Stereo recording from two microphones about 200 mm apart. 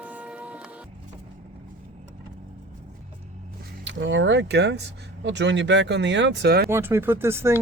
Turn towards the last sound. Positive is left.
turn(degrees=-10)  # may be behind; listen again after turning